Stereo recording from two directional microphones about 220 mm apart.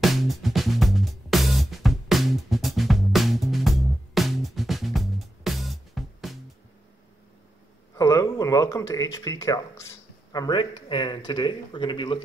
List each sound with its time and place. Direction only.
0.0 s music: centre (ahead or behind)
7.9 s speech: 15° left (ahead or behind)